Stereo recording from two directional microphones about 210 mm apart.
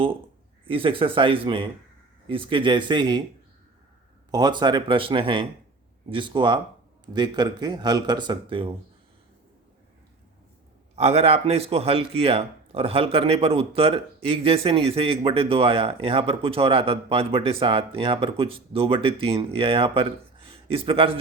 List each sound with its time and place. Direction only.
0.6 s speech: 25° right (ahead or behind)
4.3 s speech: 20° right (ahead or behind)
10.9 s speech: 30° right (ahead or behind)